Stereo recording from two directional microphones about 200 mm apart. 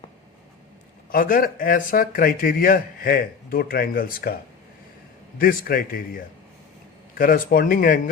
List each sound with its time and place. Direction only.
1.1 s speech: 45° left (ahead or behind)
5.4 s speech: 45° left (ahead or behind)